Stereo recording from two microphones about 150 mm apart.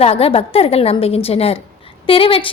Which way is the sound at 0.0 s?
40° left (ahead or behind).